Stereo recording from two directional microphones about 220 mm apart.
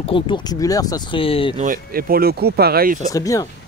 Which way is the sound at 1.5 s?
35° right (ahead or behind).